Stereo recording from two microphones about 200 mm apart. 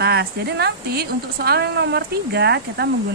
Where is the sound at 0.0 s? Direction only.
55° right (ahead or behind).